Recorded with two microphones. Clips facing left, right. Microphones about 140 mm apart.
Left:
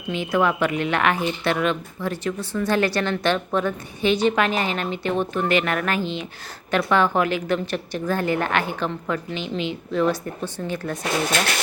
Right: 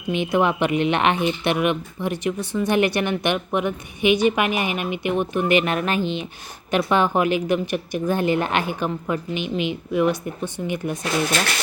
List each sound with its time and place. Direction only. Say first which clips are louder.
0.1 s speech: right 1 dB; 20° right (ahead or behind)